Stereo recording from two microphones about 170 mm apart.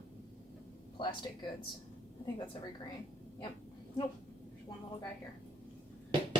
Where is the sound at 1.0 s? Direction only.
30° left (ahead or behind).